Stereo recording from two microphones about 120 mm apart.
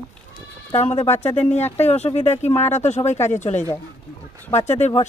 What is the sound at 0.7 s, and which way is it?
Speech, 60° left (ahead or behind).